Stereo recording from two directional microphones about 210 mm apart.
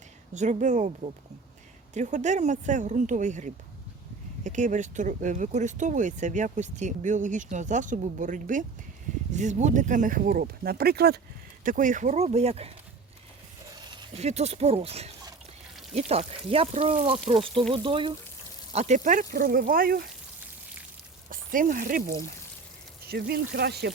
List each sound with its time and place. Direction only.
0.3 s speech: 35° right (ahead or behind)
13.9 s speech: 30° right (ahead or behind)
21.2 s speech: 40° right (ahead or behind)